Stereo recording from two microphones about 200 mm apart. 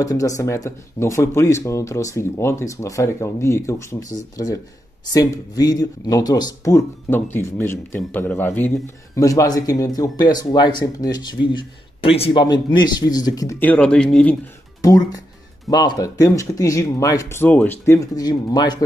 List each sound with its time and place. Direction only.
0.0 s speech: 15° left (ahead or behind)
15.7 s speech: 20° left (ahead or behind)